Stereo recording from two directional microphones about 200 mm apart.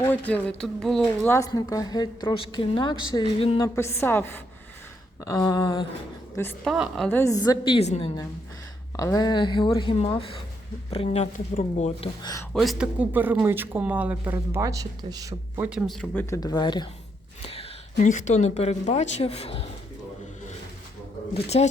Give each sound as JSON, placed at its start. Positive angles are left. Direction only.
{"t": 0.0, "sound": "speech", "side_deg": 10}
{"t": 1.3, "sound": "a woman's voice", "side_deg": 15}
{"t": 3.8, "sound": "a woman's voice", "side_deg": 10}
{"t": 6.7, "sound": "speech", "side_deg": 0}
{"t": 7.1, "sound": "a woman's voice", "side_deg": 15}
{"t": 9.0, "sound": "a woman's voice", "side_deg": 15}
{"t": 12.2, "sound": "a woman's voice", "side_deg": 15}
{"t": 12.5, "sound": "speech", "side_deg": -5}
{"t": 16.3, "sound": "a woman's voice", "side_deg": 20}
{"t": 21.3, "sound": "speech", "side_deg": 30}